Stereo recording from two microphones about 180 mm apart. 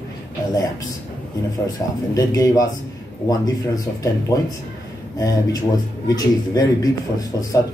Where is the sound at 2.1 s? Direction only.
20° left (ahead or behind).